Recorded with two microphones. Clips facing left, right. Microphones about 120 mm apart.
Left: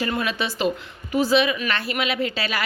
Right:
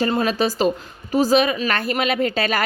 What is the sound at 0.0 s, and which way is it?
A woman's voice, 35° right (ahead or behind).